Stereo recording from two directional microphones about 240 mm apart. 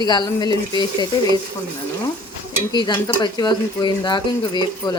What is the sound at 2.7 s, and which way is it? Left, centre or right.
Stir, centre.